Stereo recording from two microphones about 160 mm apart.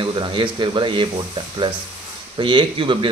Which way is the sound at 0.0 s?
30° right (ahead or behind).